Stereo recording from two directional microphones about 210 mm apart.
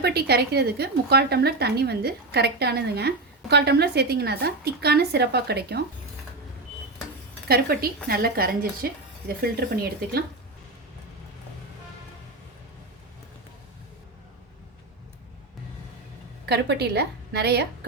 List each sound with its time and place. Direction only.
0.0 s a woman's voice: 50° right (ahead or behind)
7.4 s a woman's voice: 45° right (ahead or behind)
16.5 s a woman's voice: 50° right (ahead or behind)